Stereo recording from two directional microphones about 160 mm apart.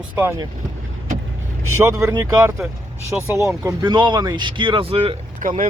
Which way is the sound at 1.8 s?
15° right (ahead or behind).